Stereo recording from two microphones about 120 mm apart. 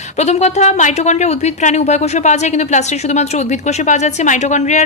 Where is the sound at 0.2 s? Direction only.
70° left (ahead or behind).